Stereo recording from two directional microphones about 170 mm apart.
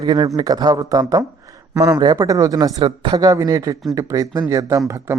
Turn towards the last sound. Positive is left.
turn(degrees=-15)  # may be behind; listen again after turning